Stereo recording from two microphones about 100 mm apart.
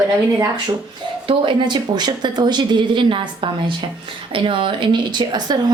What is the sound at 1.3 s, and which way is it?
A woman's voice, 55° right (ahead or behind).